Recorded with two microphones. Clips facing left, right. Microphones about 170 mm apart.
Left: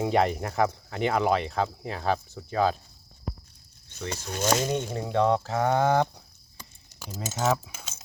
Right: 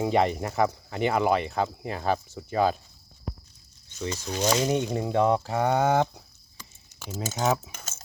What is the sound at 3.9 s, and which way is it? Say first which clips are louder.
Speech: right 3 dB; 55° left (ahead or behind).